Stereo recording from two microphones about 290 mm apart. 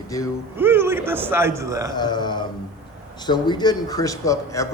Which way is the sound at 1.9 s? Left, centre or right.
Centre.